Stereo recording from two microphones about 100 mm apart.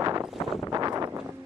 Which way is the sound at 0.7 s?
35° right (ahead or behind).